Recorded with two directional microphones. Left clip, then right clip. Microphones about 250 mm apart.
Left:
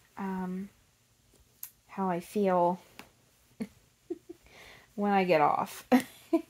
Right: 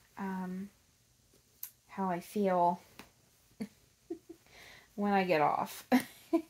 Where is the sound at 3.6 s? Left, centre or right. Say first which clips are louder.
Left 4 dB; left.